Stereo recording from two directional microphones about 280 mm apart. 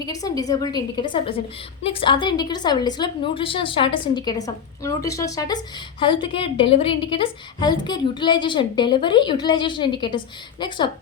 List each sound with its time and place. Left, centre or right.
0.0 s a woman's voice: centre